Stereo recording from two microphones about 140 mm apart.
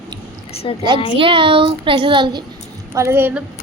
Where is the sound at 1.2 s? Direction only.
35° right (ahead or behind).